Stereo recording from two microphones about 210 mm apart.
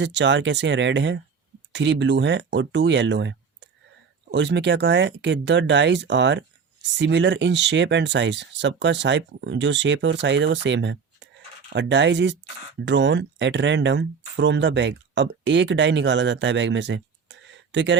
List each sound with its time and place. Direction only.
0.0 s speech: 55° right (ahead or behind)